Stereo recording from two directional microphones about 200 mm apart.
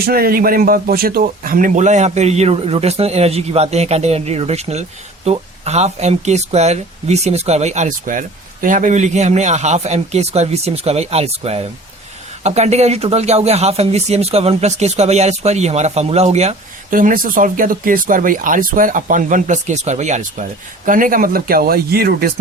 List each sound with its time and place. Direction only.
0.0 s speech: 50° right (ahead or behind)